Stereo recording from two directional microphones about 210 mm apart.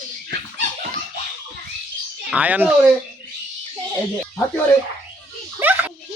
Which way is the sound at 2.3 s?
5° right (ahead or behind).